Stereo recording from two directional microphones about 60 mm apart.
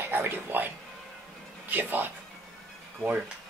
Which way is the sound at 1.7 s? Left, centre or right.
Right.